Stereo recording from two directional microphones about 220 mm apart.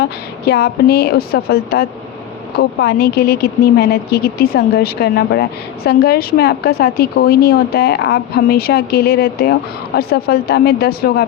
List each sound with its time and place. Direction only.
0.4 s speech: 45° left (ahead or behind)